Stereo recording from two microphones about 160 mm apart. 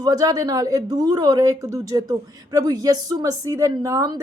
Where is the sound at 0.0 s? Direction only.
20° right (ahead or behind).